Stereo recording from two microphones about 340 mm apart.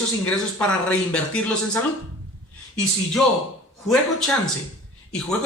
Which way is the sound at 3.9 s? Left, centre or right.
Centre.